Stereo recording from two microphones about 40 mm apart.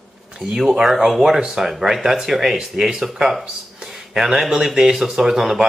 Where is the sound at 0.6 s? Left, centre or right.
Centre.